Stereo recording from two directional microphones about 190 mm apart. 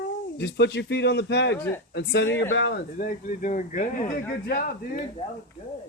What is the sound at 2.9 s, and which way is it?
Speech, 45° left (ahead or behind).